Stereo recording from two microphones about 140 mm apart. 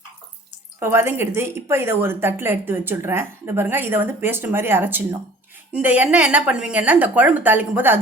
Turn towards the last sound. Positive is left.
turn(degrees=-15)  # may be behind; listen again after turning